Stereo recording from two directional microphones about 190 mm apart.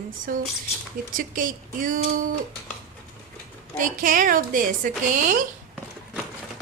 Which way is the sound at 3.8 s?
45° right (ahead or behind).